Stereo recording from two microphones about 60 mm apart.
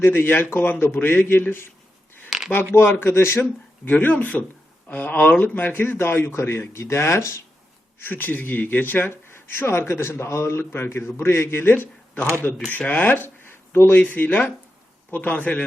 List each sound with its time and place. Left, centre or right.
0.0 s speech: left
2.3 s a sound: centre
2.7 s a man's voice: left
3.8 s speech: left
7.9 s speech: left
14.0 s speech: left